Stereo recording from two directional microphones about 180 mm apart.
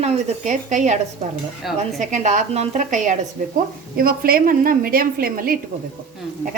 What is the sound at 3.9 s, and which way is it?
A woman's voice, 55° right (ahead or behind).